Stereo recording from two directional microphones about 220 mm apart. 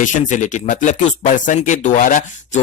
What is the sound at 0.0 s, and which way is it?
Speech, 35° left (ahead or behind).